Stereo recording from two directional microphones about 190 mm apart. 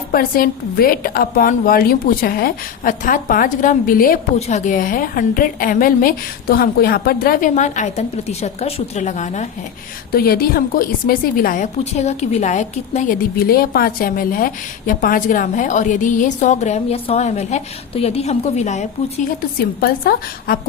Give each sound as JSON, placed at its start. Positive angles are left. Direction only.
{"t": 0.1, "sound": "a woman's voice", "side_deg": 50}
{"t": 4.4, "sound": "a woman's voice", "side_deg": 35}
{"t": 10.1, "sound": "a woman's voice", "side_deg": 50}
{"t": 19.8, "sound": "a woman's voice", "side_deg": 55}